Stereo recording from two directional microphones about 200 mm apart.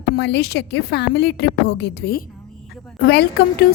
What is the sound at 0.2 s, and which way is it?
A woman's voice, 60° left (ahead or behind).